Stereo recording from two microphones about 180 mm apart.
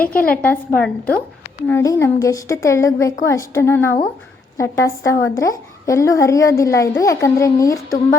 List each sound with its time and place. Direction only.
0.0 s a woman's voice: 55° left (ahead or behind)
0.4 s a woman's voice: 10° left (ahead or behind)